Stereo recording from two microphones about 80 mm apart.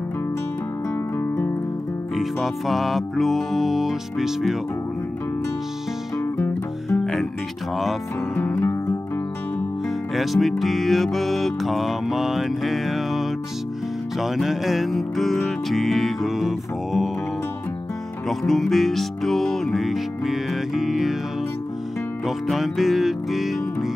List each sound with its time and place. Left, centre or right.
2.1 s music: centre
6.1 s music: left
8.4 s music: left
10.1 s music: centre
18.4 s music: centre
22.2 s music: centre